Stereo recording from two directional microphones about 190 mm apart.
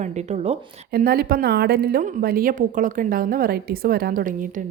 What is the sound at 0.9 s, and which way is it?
A woman's voice, 55° right (ahead or behind).